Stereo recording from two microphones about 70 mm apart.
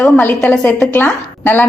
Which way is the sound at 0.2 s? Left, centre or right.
Left.